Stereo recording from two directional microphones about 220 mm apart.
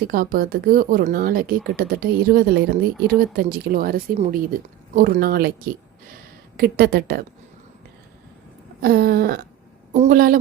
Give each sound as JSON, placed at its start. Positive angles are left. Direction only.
{"t": 0.0, "sound": "a woman's voice", "side_deg": -40}
{"t": 6.6, "sound": "a woman's voice", "side_deg": -45}
{"t": 8.8, "sound": "a woman's voice", "side_deg": -45}